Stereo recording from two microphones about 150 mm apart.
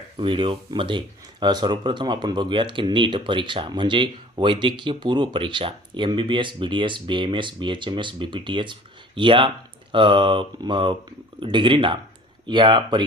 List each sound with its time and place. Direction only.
0.2 s speech: 35° right (ahead or behind)